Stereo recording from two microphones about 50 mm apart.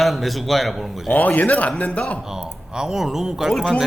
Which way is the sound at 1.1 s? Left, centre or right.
Left.